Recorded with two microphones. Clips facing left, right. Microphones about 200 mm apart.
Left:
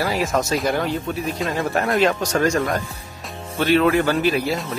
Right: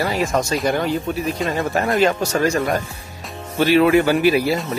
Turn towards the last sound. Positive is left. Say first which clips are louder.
# right 4 dB
turn(degrees=-5)  # may be behind; listen again after turning